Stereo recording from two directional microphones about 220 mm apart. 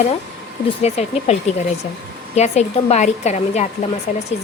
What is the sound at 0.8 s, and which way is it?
A woman's voice, 30° left (ahead or behind).